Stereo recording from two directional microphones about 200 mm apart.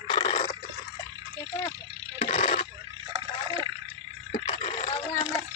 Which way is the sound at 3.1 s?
25° right (ahead or behind).